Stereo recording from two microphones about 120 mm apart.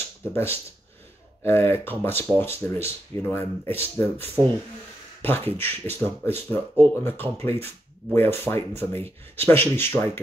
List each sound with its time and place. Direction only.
0.3 s speech: 20° left (ahead or behind)